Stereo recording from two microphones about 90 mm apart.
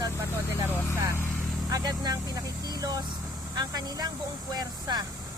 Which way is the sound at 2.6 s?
50° right (ahead or behind).